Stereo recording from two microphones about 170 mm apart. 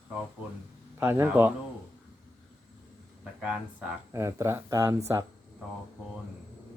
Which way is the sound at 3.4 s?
5° right (ahead or behind).